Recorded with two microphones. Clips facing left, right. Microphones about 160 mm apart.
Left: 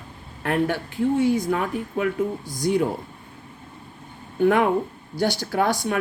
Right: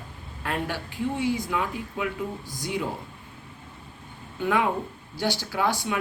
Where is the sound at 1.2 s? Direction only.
50° left (ahead or behind).